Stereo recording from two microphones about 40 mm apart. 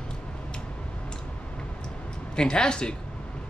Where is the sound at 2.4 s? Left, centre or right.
Left.